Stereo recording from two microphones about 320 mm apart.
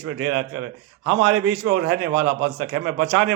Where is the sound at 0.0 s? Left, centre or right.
Right.